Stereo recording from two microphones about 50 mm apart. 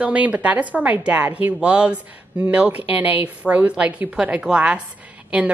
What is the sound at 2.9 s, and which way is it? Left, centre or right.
A woman's voice, right.